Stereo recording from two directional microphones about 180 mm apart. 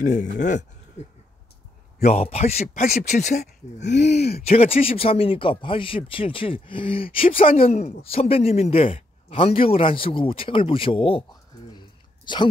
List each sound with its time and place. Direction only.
0.0 s speech: 45° left (ahead or behind)
3.8 s speech: 70° left (ahead or behind)
4.4 s speech: 35° left (ahead or behind)
12.3 s speech: 25° left (ahead or behind)